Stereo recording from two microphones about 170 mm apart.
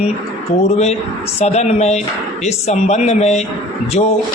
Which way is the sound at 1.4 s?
40° left (ahead or behind).